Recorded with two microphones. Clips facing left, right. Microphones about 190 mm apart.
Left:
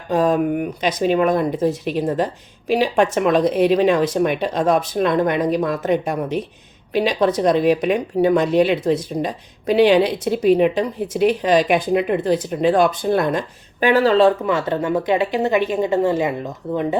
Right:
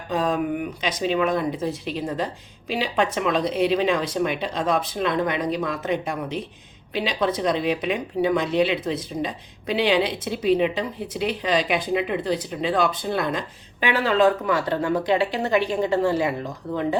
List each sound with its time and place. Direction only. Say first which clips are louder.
0.1 s a woman's voice: left 6 dB; 50° left (ahead or behind); by 16.3 s 20° left (ahead or behind)